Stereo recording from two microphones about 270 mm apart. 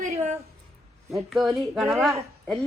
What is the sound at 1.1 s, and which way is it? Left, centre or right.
Speech, centre.